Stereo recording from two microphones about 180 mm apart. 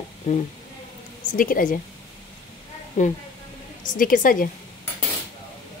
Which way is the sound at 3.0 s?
45° left (ahead or behind).